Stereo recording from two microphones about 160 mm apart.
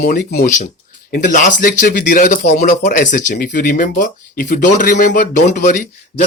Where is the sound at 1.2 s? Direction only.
55° left (ahead or behind).